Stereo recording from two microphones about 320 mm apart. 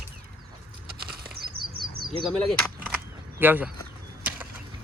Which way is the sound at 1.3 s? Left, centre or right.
Right.